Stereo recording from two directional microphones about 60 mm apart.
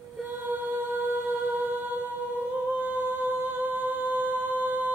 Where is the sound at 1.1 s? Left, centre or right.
Right.